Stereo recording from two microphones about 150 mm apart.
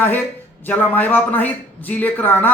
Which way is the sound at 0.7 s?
10° left (ahead or behind).